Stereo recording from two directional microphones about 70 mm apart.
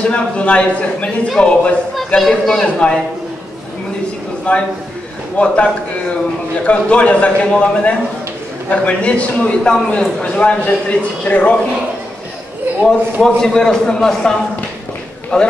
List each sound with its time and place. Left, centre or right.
0.0 s a man's voice: centre
4.5 s a man's voice: centre
6.6 s a man's voice: centre
12.8 s a man's voice: centre
15.3 s a man's voice: centre